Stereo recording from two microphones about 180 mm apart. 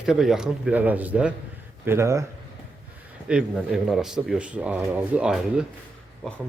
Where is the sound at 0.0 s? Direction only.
Centre (ahead or behind).